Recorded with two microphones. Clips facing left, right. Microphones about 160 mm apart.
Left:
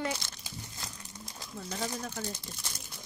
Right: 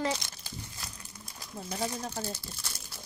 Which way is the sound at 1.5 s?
30° right (ahead or behind).